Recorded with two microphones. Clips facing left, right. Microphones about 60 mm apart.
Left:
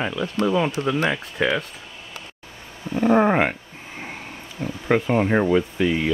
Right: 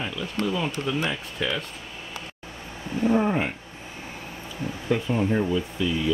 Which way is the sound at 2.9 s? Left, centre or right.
Left.